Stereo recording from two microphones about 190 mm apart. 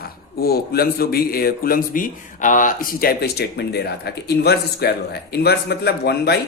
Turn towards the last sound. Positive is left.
turn(degrees=60)  # may be behind; listen again after turning